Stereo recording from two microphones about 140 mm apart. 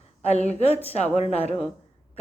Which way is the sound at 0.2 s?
50° left (ahead or behind).